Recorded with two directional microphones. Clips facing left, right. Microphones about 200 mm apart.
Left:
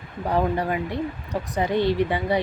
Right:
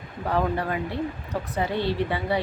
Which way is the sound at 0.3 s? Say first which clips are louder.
Left 2 dB; 15° left (ahead or behind).